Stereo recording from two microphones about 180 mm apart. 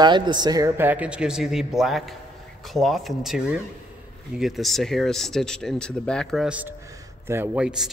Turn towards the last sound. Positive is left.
turn(degrees=-5)  # may be behind; listen again after turning